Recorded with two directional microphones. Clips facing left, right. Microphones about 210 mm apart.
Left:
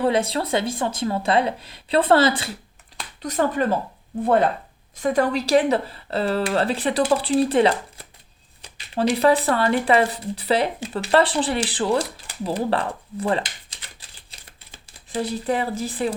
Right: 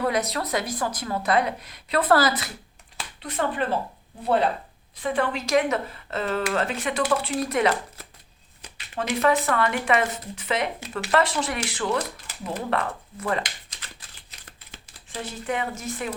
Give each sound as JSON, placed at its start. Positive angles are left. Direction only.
{"t": 0.0, "sound": "speech", "side_deg": 30}
{"t": 3.2, "sound": "speech", "side_deg": 40}
{"t": 14.3, "sound": "a sound", "side_deg": 30}
{"t": 14.8, "sound": "speech", "side_deg": 35}